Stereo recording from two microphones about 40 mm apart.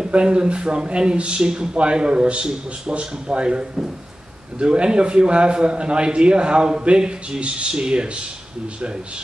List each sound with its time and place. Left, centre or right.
0.1 s speech: right